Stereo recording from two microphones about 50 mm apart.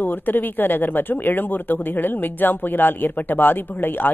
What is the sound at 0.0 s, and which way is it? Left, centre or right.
Speech, left.